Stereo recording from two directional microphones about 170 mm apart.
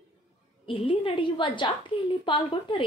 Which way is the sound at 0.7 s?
30° left (ahead or behind).